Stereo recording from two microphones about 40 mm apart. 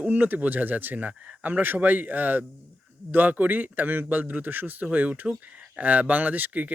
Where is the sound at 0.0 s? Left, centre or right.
Right.